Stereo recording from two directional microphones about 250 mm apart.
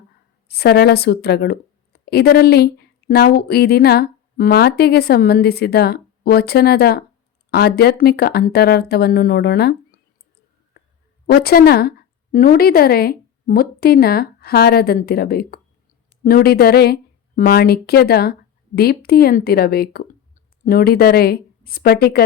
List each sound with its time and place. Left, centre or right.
0.4 s a woman's voice: left
11.3 s a woman's voice: left